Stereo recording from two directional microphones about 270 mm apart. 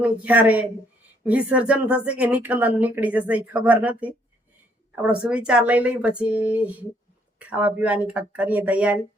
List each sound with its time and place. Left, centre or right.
0.0 s speech: centre
5.3 s speech: centre